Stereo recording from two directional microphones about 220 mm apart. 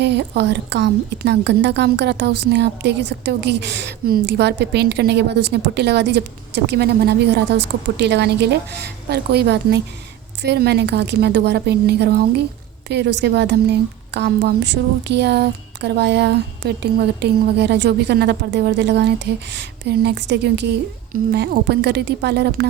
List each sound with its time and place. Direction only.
0.0 s a woman's voice: 50° right (ahead or behind)